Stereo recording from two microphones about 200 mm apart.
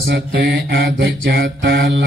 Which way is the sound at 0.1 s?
55° right (ahead or behind).